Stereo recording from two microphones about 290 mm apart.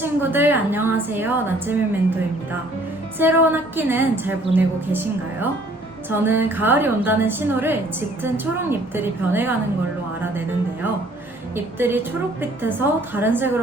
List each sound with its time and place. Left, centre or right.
0.0 s a woman's voice: centre
3.2 s a woman's voice: centre
11.5 s a woman's voice: centre